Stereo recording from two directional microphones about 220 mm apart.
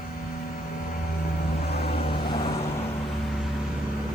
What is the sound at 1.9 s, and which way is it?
Vehicle, 25° left (ahead or behind).